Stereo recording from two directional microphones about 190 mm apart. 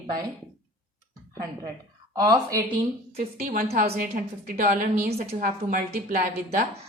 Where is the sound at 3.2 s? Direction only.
50° right (ahead or behind).